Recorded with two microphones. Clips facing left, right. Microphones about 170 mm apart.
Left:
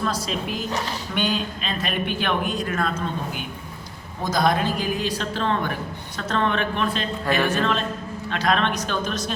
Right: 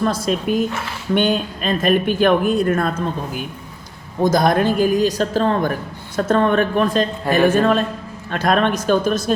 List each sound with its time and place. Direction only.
0.0 s speech: 50° right (ahead or behind)
4.2 s speech: 50° right (ahead or behind)